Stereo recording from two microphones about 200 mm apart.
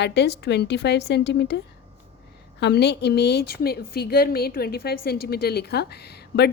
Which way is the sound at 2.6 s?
55° left (ahead or behind).